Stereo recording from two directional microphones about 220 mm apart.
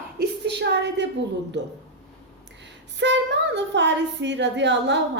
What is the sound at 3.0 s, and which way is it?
Speech, 50° right (ahead or behind).